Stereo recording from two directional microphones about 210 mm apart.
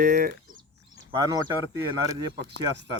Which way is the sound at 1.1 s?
15° right (ahead or behind).